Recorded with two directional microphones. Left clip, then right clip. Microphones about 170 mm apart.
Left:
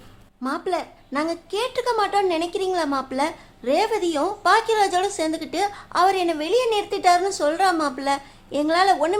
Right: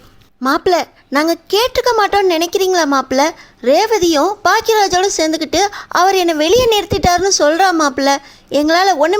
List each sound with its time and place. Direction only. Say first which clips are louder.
0.4 s a woman's voice: right 12 dB; 45° right (ahead or behind)